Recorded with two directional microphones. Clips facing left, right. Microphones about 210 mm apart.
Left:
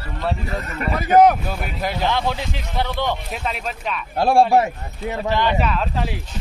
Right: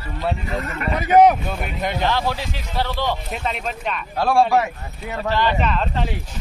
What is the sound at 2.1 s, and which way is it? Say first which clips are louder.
Speech: even; 15° left (ahead or behind).